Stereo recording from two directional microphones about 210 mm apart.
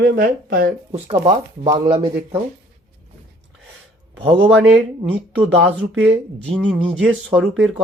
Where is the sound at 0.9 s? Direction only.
25° right (ahead or behind).